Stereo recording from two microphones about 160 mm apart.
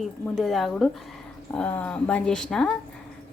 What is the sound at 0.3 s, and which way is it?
A woman's voice, centre (ahead or behind).